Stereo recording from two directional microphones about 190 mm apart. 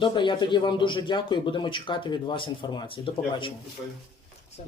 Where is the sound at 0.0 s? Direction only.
25° left (ahead or behind).